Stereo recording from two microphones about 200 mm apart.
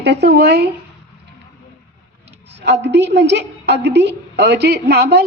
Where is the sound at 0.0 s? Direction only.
55° right (ahead or behind).